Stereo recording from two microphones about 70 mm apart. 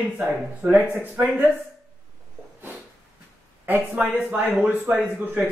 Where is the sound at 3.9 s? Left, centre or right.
Right.